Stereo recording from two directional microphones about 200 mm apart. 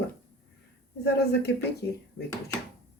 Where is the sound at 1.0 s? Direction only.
55° left (ahead or behind).